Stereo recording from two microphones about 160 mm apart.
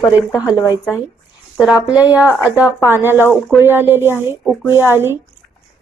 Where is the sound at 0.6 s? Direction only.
15° left (ahead or behind).